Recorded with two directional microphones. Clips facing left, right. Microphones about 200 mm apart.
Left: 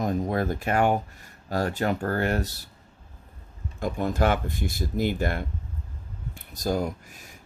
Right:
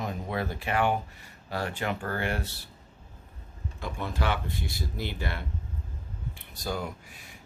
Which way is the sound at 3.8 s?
45° left (ahead or behind).